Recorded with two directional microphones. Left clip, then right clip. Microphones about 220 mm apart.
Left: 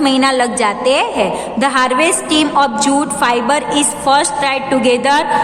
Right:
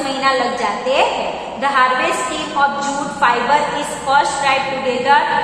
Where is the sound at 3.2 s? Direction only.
55° left (ahead or behind).